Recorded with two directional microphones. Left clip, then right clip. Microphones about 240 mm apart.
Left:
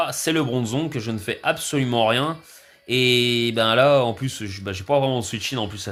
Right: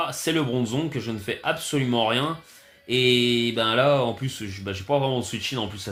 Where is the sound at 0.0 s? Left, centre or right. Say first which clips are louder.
Left 3 dB; left.